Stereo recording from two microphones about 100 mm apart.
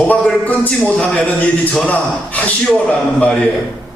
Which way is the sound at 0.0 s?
15° left (ahead or behind).